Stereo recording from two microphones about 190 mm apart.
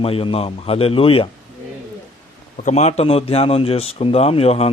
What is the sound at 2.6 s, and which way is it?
Speech, 35° left (ahead or behind).